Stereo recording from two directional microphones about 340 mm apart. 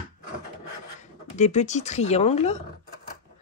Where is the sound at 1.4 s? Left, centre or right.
Left.